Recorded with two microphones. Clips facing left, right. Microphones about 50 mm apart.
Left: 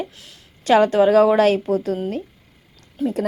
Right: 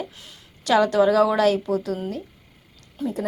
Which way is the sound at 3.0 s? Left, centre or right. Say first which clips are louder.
Left 5 dB; left.